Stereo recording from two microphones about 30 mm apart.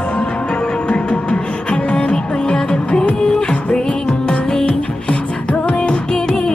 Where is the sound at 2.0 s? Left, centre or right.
Left.